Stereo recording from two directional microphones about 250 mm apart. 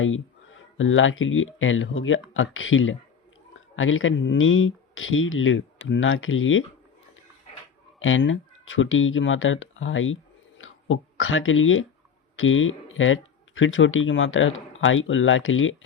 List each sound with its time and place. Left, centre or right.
0.8 s speech: left
7.9 s speech: left